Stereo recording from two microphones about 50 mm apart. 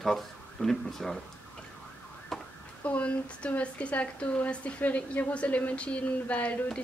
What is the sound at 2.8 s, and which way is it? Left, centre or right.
A woman's voice, left.